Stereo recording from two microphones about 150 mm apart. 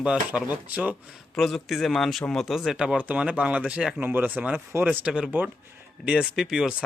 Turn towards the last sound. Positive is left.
turn(degrees=-5)  # may be behind; listen again after turning